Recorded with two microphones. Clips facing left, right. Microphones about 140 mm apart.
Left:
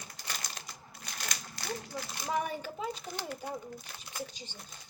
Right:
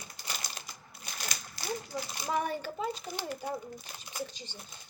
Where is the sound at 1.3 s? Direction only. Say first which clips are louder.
Right 2 dB; 10° right (ahead or behind).